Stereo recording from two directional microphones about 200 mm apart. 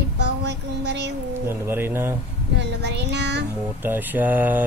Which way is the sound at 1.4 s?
10° right (ahead or behind).